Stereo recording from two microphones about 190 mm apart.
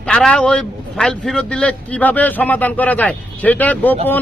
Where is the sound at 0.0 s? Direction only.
5° left (ahead or behind).